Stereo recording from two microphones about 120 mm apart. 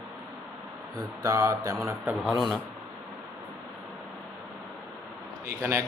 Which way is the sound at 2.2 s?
Centre (ahead or behind).